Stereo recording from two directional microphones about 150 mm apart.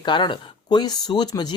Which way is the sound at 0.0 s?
30° left (ahead or behind).